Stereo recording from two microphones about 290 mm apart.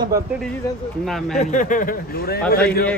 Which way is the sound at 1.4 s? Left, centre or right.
Left.